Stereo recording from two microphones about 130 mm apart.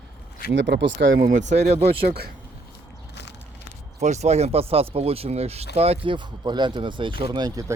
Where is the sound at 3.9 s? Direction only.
60° right (ahead or behind); by 7.6 s 30° right (ahead or behind).